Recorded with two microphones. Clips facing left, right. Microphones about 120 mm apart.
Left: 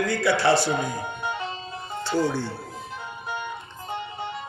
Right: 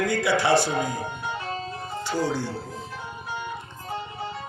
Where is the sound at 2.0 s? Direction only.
10° right (ahead or behind).